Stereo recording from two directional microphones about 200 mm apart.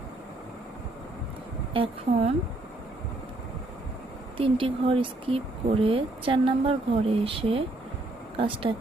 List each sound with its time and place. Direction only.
1.7 s speech: 25° right (ahead or behind)
4.4 s speech: 25° right (ahead or behind)
8.7 s speech: 25° right (ahead or behind)